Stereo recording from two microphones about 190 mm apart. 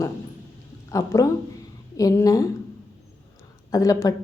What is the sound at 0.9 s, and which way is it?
Speech, 15° left (ahead or behind).